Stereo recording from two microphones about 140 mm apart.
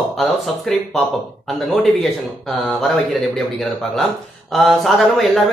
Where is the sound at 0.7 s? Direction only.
5° left (ahead or behind).